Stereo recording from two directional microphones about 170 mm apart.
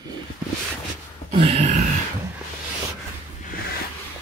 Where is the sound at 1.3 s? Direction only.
35° right (ahead or behind).